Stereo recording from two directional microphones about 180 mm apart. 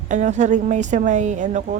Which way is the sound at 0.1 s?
40° right (ahead or behind).